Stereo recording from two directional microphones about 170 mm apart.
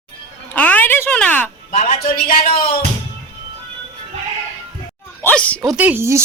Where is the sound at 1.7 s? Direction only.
45° left (ahead or behind).